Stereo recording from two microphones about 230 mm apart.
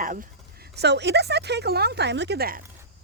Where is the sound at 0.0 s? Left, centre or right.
Right.